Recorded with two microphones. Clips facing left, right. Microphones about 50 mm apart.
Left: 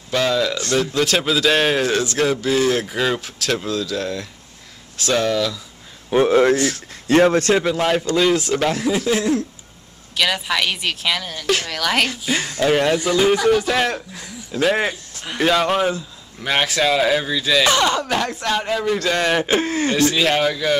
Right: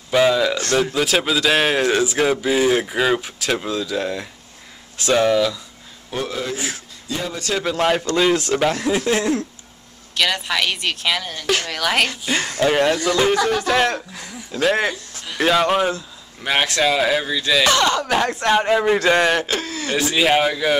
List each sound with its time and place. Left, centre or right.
0.1 s speech: centre
6.0 s a sound: left
7.1 s speech: left
7.6 s speech: centre
12.9 s speech: centre
18.1 s speech: centre
18.4 s a man's voice: right
19.4 s speech: left
20.0 s speech: centre